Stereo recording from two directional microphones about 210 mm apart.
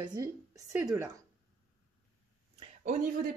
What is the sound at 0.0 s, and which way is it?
A woman's voice, 20° right (ahead or behind).